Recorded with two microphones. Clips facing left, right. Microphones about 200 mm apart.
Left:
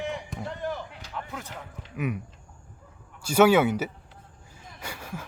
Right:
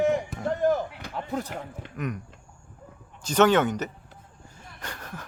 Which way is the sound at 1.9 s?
5° left (ahead or behind).